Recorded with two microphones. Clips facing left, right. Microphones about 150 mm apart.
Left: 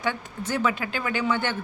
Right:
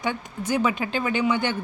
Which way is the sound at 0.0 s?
15° right (ahead or behind).